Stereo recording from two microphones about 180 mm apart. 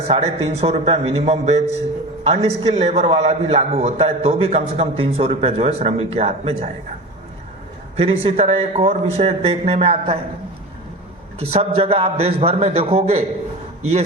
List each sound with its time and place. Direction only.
0.1 s a man's voice: 35° right (ahead or behind)
7.9 s a man's voice: 30° right (ahead or behind)
11.3 s a man's voice: 35° right (ahead or behind)